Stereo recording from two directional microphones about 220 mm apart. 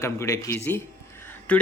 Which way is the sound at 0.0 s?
15° left (ahead or behind).